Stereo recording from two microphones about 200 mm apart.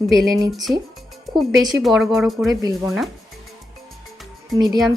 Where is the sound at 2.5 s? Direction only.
15° right (ahead or behind).